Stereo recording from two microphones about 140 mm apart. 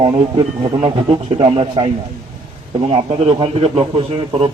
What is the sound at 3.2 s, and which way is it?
Speech, 40° right (ahead or behind).